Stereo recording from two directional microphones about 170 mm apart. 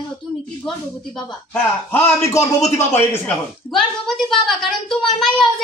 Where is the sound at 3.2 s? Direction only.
5° left (ahead or behind).